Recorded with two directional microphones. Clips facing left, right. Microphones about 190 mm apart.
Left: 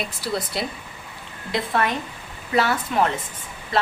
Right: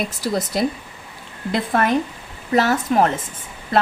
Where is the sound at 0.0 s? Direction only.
45° right (ahead or behind).